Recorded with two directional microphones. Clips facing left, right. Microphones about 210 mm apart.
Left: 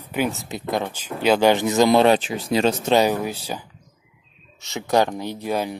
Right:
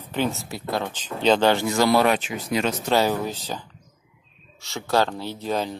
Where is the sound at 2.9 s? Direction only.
15° left (ahead or behind).